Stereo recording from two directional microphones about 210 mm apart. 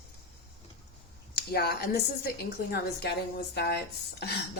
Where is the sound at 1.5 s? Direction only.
50° left (ahead or behind).